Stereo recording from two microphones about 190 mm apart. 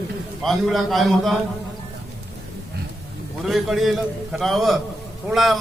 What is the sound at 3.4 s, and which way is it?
A man's voice, centre (ahead or behind).